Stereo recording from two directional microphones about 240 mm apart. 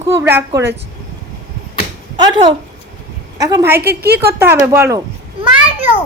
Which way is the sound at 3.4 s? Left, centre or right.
Centre.